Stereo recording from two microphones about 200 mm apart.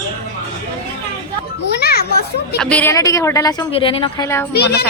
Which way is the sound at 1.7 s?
50° left (ahead or behind).